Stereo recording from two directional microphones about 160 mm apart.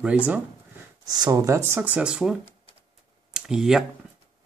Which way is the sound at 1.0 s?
25° right (ahead or behind).